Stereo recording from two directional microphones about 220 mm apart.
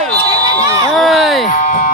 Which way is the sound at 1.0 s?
Centre (ahead or behind).